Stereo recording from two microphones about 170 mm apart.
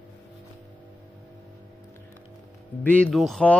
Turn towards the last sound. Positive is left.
turn(degrees=5)  # may be behind; listen again after turning